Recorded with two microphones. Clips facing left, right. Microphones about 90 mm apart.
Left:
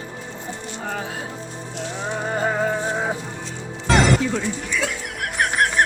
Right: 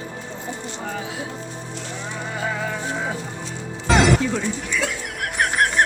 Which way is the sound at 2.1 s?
45° left (ahead or behind).